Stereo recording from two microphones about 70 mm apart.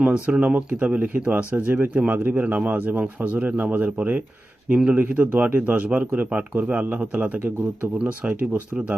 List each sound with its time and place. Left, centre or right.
0.0 s speech: centre